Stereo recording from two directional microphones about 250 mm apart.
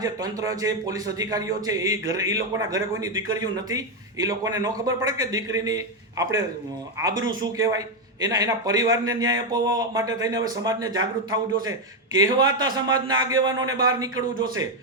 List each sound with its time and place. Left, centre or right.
0.0 s a man's voice: centre